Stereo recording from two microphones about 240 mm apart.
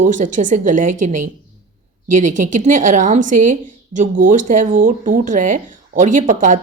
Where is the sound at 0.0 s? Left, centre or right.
Right.